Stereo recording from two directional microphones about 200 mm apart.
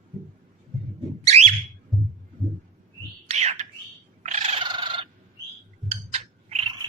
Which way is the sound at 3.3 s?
35° right (ahead or behind).